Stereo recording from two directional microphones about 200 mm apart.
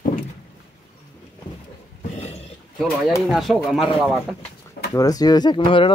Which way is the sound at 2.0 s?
35° left (ahead or behind).